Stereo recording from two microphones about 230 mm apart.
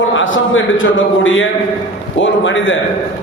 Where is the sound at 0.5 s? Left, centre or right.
Left.